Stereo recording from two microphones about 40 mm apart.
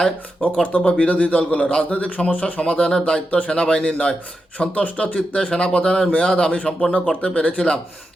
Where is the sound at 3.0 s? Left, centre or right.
Left.